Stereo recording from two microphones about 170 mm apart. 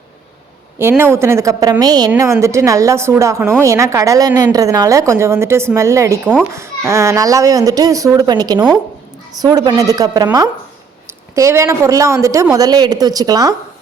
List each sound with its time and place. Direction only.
0.8 s a woman's voice: 15° right (ahead or behind)
11.3 s speech: 20° right (ahead or behind)